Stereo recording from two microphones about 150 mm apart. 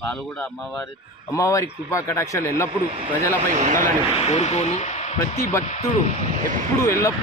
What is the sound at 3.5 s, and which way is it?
Speech, 55° right (ahead or behind).